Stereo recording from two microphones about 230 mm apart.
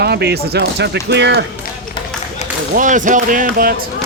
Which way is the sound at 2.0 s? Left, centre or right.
Left.